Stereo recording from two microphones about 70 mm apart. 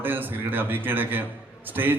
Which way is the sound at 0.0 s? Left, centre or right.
Right.